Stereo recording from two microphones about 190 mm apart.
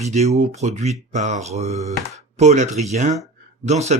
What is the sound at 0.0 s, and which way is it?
Speech, 35° right (ahead or behind).